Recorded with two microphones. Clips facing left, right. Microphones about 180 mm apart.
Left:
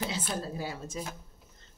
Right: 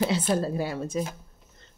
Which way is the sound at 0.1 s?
65° right (ahead or behind).